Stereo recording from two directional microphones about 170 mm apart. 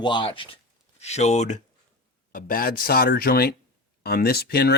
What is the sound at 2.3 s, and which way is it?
Speech, 55° left (ahead or behind).